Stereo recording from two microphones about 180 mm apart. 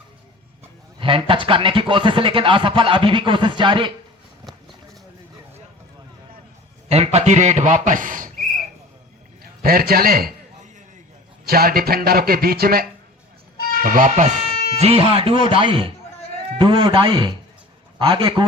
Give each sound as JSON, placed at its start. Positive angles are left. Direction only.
{"t": 0.9, "sound": "speech", "side_deg": -30}
{"t": 6.8, "sound": "a man's voice", "side_deg": -35}
{"t": 9.6, "sound": "a sound", "side_deg": -55}
{"t": 11.4, "sound": "a man's voice", "side_deg": -55}
{"t": 14.8, "sound": "speech", "side_deg": -35}